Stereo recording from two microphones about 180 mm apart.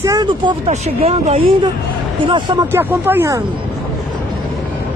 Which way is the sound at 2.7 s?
10° right (ahead or behind).